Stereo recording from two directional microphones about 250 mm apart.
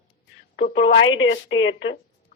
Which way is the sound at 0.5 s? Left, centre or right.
Left.